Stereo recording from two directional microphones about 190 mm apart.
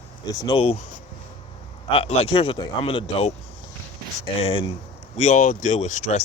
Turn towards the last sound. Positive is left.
turn(degrees=40)  # may be behind; listen again after turning